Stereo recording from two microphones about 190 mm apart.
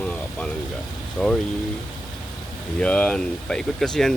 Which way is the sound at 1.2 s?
Centre (ahead or behind).